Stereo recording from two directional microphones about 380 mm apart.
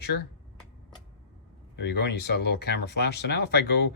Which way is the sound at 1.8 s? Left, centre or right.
Left.